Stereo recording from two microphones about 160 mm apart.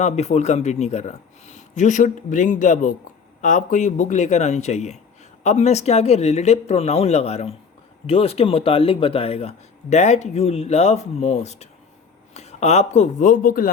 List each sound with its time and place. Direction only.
0.0 s speech: 45° left (ahead or behind); by 13.7 s 65° left (ahead or behind)